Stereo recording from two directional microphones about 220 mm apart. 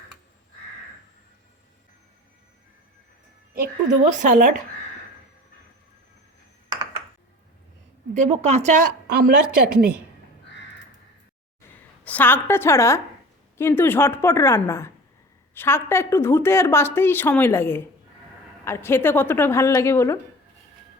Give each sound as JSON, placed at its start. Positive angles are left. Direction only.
{"t": 4.2, "sound": "a woman's voice", "side_deg": -40}
{"t": 8.1, "sound": "a woman's voice", "side_deg": -30}
{"t": 12.0, "sound": "a woman's voice", "side_deg": 10}